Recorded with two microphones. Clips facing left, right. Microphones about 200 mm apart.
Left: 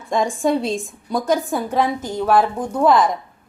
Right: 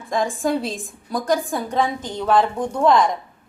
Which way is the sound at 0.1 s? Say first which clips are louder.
Left 2 dB; centre (ahead or behind).